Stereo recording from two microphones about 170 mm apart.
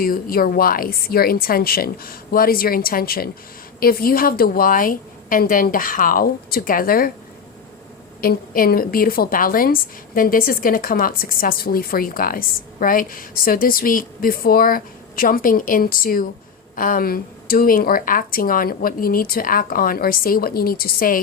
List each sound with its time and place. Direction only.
0.0 s a woman's voice: 60° left (ahead or behind)
8.2 s a woman's voice: 55° left (ahead or behind)